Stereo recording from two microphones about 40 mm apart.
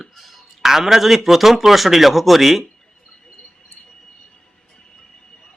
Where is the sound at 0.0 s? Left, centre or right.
Centre.